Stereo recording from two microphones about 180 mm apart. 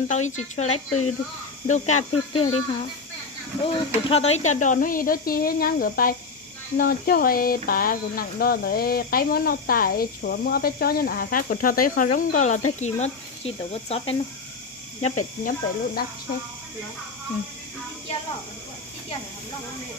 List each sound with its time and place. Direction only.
0.1 s speech: 40° left (ahead or behind)
15.0 s speech: 50° left (ahead or behind)